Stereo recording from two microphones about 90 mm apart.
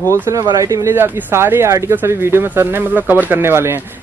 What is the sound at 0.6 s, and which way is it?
Speech, 35° right (ahead or behind).